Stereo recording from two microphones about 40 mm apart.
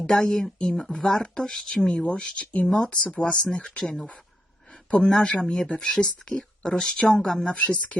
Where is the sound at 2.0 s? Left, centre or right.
Left; by 6.9 s centre.